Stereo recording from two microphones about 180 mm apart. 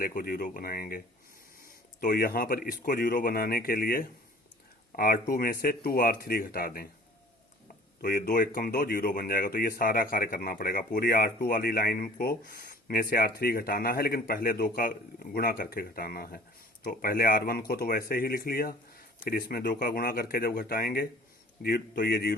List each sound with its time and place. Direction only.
0.0 s speech: 50° left (ahead or behind)
8.0 s speech: 55° left (ahead or behind)